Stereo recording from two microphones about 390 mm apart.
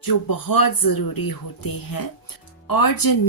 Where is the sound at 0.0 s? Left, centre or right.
Left.